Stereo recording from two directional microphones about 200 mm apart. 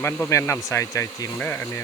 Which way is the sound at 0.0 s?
15° left (ahead or behind).